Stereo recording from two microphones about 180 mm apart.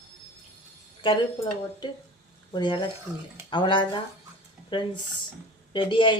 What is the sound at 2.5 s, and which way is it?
A woman's voice, 25° left (ahead or behind).